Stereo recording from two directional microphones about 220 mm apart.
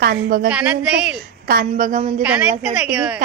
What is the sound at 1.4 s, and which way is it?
Speech, 40° right (ahead or behind).